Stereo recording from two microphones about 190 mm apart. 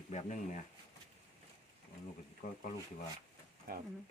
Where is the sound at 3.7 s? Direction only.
55° right (ahead or behind).